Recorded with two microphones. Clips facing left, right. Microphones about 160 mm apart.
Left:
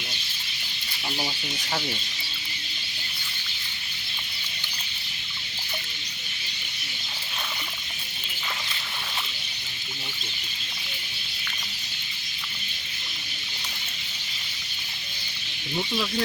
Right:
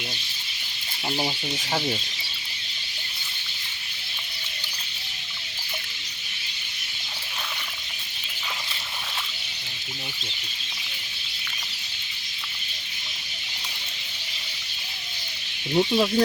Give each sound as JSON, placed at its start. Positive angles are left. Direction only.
{"t": 15.7, "sound": "speech", "side_deg": -35}